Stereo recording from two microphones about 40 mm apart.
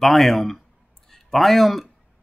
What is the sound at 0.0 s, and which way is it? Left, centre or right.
Speech, centre.